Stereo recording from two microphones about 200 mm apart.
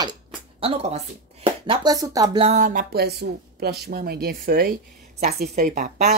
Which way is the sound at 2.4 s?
35° right (ahead or behind).